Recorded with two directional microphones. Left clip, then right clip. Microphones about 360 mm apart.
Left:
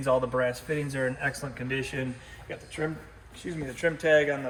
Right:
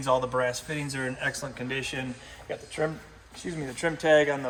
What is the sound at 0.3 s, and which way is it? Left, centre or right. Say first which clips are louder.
Speech: even; centre.